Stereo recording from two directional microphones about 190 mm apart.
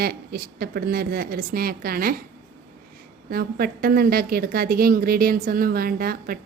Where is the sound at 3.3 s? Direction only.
50° right (ahead or behind).